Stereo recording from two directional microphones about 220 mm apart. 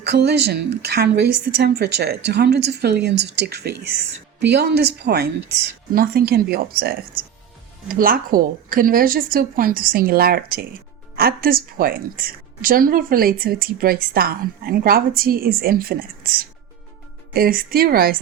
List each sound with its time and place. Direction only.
0.0 s a woman's voice: 50° right (ahead or behind)